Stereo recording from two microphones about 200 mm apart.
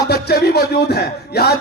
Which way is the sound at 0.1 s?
55° left (ahead or behind).